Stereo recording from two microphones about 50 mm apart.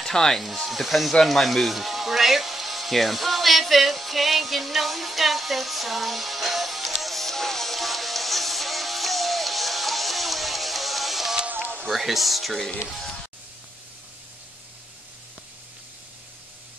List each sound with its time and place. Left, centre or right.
0.0 s speech: centre
1.2 s a sound: centre
11.8 s speech: centre